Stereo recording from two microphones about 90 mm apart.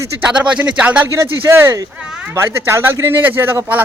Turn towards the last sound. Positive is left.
turn(degrees=-25)  # may be behind; listen again after turning